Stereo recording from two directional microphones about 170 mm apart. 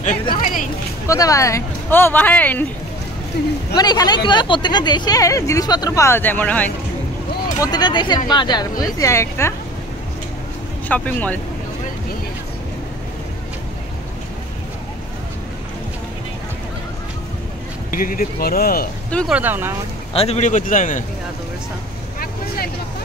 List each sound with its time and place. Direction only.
0.4 s a sound: 50° left (ahead or behind)
1.0 s speech: 20° left (ahead or behind)
3.3 s speech: 75° left (ahead or behind)
3.7 s speech: 25° left (ahead or behind)
7.6 s speech: 25° left (ahead or behind)
10.9 s speech: 10° left (ahead or behind)
17.9 s speech: 55° left (ahead or behind)
19.0 s speech: 5° left (ahead or behind)
19.3 s speech: 10° right (ahead or behind)
20.2 s a man's voice: 40° left (ahead or behind)